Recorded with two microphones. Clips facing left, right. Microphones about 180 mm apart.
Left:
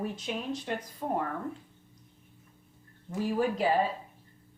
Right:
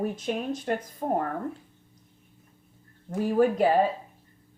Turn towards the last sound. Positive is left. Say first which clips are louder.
# right 6 dB
turn(degrees=-50)  # may be behind; listen again after turning